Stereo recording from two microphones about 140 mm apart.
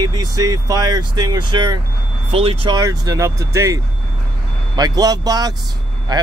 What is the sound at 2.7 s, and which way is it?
Speech, 25° right (ahead or behind).